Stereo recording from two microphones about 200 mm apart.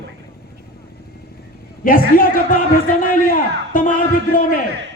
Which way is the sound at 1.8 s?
45° left (ahead or behind).